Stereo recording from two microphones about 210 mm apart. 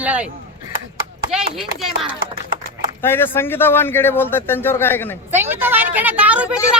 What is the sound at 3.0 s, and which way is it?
A man's voice, 10° left (ahead or behind).